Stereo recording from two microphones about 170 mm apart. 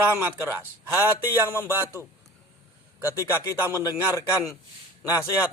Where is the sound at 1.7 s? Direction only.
15° right (ahead or behind).